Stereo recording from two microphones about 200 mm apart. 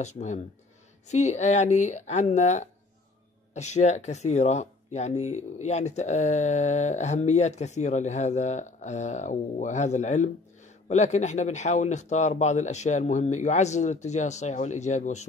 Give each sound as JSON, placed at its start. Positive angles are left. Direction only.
{"t": 0.0, "sound": "speech", "side_deg": 35}